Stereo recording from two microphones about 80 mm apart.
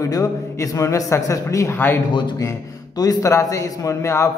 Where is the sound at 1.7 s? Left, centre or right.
Left.